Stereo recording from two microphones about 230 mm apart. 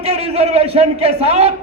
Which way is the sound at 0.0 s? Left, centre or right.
Right.